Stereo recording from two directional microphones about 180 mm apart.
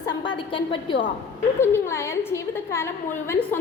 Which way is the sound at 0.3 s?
30° left (ahead or behind).